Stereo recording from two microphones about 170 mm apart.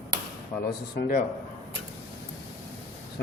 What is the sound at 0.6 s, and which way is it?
Speech, 60° left (ahead or behind).